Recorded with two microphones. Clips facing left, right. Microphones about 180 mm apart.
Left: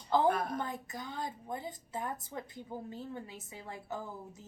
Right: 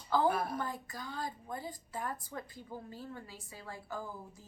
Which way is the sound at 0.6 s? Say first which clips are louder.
Left 1 dB; 20° left (ahead or behind).